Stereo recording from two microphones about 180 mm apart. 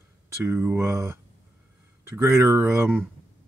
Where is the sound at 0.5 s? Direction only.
15° right (ahead or behind).